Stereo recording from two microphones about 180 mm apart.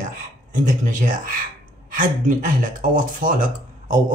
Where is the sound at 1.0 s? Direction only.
50° right (ahead or behind).